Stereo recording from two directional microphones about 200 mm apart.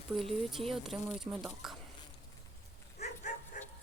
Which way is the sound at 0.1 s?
5° right (ahead or behind).